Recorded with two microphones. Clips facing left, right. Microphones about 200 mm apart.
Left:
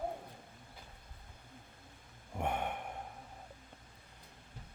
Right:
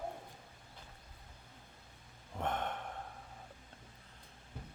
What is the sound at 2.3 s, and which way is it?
Gasp, 10° left (ahead or behind).